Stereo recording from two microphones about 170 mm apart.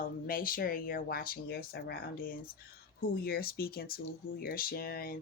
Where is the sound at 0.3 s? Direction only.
55° left (ahead or behind).